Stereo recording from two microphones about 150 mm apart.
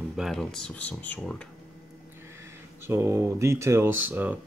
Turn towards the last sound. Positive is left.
turn(degrees=-10)  # may be behind; listen again after turning